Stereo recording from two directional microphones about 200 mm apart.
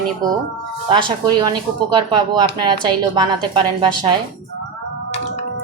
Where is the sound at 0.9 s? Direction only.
20° right (ahead or behind).